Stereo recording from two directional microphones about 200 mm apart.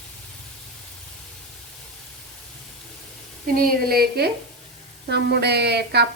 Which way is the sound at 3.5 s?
50° right (ahead or behind).